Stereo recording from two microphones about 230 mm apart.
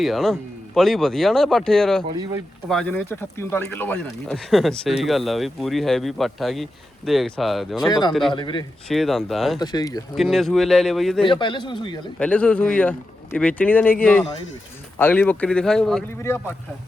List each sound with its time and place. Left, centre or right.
0.0 s speech: centre
7.9 s speech: centre
8.9 s speech: centre
9.6 s speech: centre
10.2 s speech: centre
11.2 s speech: left
12.2 s speech: centre